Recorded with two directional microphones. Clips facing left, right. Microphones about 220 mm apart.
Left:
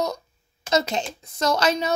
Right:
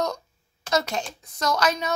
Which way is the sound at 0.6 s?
20° left (ahead or behind).